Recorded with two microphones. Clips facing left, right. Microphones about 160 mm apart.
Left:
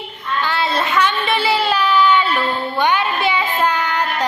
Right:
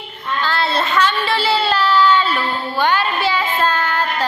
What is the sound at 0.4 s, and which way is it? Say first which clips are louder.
Child singing: right 1 dB; 15° left (ahead or behind).